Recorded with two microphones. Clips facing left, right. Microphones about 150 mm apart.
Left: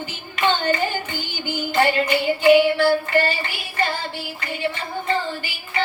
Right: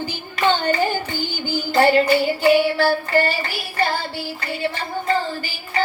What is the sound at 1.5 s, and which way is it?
Music, 35° right (ahead or behind).